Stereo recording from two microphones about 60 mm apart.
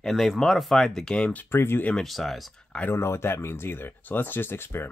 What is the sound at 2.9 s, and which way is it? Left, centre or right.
Speech, left.